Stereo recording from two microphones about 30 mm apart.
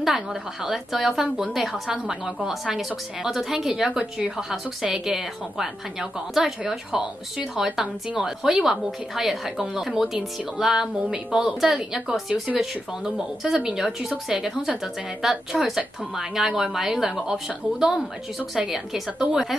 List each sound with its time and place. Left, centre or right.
0.0 s a woman's voice: centre
11.6 s a woman's voice: centre
17.3 s a woman's voice: right
19.1 s a woman's voice: centre